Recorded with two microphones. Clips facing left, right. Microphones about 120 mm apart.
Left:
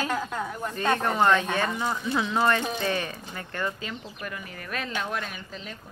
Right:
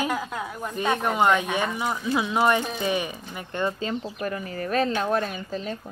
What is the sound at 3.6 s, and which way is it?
Speech, 30° right (ahead or behind).